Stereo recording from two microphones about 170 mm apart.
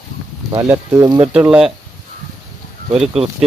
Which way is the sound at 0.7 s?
20° right (ahead or behind).